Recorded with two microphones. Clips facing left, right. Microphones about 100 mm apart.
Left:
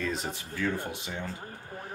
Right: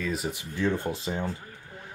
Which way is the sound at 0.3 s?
20° right (ahead or behind).